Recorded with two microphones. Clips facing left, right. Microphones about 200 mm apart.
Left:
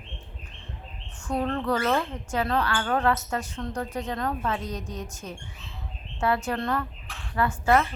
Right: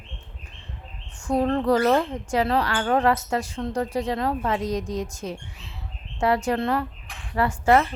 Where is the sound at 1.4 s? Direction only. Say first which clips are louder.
Right 6 dB; 35° right (ahead or behind).